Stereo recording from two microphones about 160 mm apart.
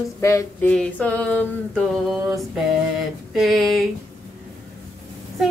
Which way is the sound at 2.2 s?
5° right (ahead or behind).